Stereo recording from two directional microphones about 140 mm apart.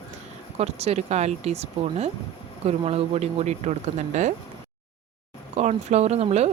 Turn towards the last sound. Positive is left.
turn(degrees=-50)  # may be behind; listen again after turning